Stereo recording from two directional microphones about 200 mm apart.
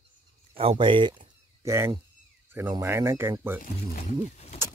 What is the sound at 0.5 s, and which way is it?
Speech, 25° right (ahead or behind).